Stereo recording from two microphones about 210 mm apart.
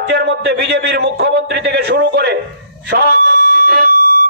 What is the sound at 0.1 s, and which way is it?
A man's voice, 50° right (ahead or behind).